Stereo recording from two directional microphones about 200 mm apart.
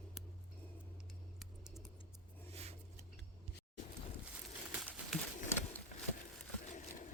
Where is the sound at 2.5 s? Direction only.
30° right (ahead or behind).